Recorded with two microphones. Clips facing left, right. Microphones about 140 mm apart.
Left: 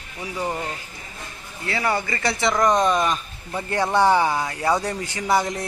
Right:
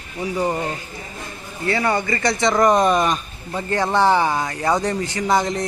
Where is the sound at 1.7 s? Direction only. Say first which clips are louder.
Right 4 dB; centre (ahead or behind).